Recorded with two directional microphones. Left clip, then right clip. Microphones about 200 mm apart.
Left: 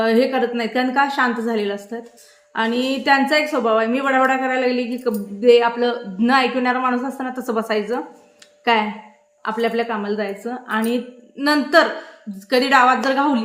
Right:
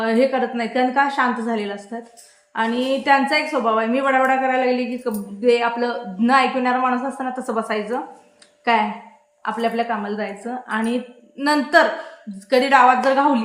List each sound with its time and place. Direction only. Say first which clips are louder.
0.0 s a woman's voice: left 1 dB; 20° left (ahead or behind)